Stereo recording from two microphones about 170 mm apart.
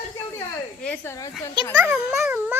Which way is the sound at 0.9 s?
15° left (ahead or behind).